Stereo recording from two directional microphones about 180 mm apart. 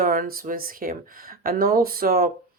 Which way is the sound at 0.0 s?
50° right (ahead or behind).